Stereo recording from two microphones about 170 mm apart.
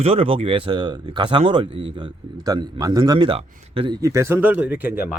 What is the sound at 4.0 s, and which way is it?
Speech, 20° right (ahead or behind).